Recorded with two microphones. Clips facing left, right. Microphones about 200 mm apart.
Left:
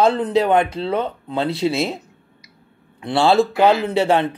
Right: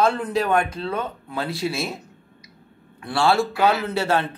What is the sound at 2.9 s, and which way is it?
A man's voice, 20° left (ahead or behind).